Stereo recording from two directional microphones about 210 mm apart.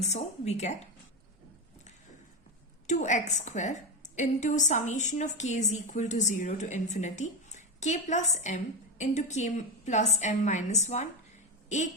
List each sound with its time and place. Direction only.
0.0 s a woman's voice: 30° left (ahead or behind)
2.8 s a woman's voice: 35° left (ahead or behind)